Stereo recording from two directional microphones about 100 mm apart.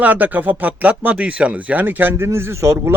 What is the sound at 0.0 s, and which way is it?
A man's voice, 15° right (ahead or behind).